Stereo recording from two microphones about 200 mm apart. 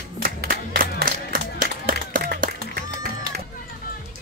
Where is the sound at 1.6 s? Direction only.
45° right (ahead or behind).